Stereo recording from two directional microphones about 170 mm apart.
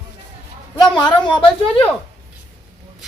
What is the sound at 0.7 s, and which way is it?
Speech, 25° left (ahead or behind).